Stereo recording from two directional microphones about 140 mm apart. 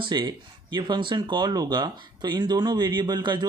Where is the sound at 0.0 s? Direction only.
35° right (ahead or behind).